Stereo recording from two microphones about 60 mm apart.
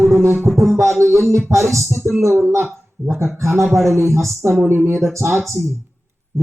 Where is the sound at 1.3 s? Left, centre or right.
Right.